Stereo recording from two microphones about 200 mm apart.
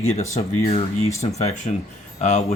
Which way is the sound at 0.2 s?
30° left (ahead or behind).